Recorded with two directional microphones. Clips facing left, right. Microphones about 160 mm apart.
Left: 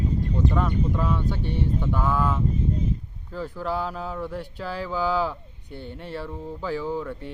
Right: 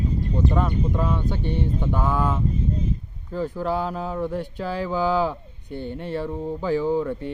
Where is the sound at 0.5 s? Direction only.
20° right (ahead or behind).